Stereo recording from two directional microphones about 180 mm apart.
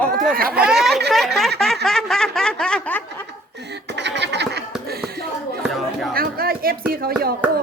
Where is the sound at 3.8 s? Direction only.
75° right (ahead or behind).